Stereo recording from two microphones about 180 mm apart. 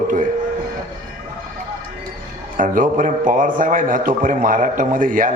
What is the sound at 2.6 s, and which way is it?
A man's voice, 45° right (ahead or behind).